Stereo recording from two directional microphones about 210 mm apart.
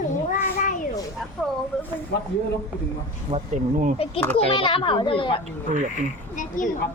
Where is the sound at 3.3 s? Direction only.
20° right (ahead or behind).